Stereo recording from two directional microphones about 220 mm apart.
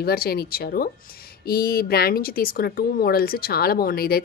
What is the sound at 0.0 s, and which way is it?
Speech, 45° left (ahead or behind).